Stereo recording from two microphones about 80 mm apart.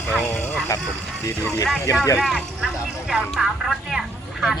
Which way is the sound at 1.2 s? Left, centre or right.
Left.